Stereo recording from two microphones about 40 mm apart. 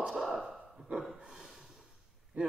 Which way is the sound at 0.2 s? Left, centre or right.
Centre.